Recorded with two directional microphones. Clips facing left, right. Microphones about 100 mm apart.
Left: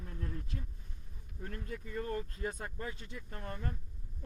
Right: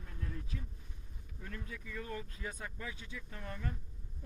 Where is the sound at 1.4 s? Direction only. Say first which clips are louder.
Left 4 dB; 40° left (ahead or behind).